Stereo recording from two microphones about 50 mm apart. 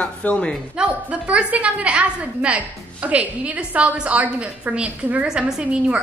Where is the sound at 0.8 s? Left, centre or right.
Right.